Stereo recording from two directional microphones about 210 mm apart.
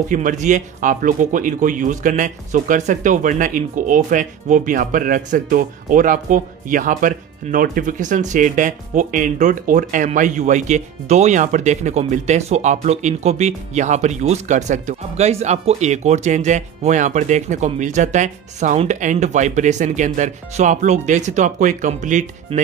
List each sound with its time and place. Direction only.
0.1 s speech: 40° right (ahead or behind)